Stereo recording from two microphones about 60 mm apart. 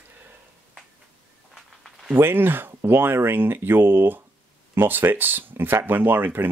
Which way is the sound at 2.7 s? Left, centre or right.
Right.